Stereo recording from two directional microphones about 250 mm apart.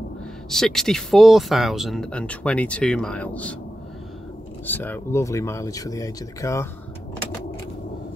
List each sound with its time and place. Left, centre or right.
0.5 s speech: centre
4.6 s speech: centre